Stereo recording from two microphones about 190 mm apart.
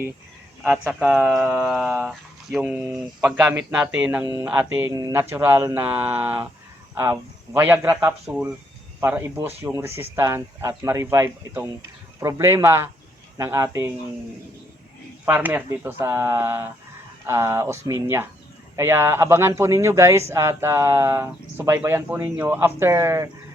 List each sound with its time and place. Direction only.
0.6 s speech: 5° right (ahead or behind)
15.2 s speech: 10° right (ahead or behind)